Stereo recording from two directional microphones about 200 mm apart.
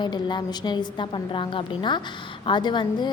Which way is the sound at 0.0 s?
20° left (ahead or behind).